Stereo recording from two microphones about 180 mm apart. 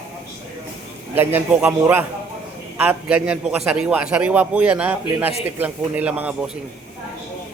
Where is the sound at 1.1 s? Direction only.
10° right (ahead or behind).